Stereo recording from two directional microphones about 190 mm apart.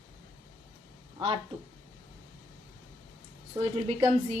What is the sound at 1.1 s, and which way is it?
Speech, 25° right (ahead or behind).